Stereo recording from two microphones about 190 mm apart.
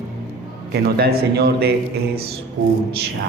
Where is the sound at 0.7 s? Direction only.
55° right (ahead or behind).